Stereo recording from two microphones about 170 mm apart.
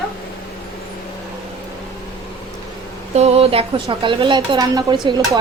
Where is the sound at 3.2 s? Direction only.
35° right (ahead or behind).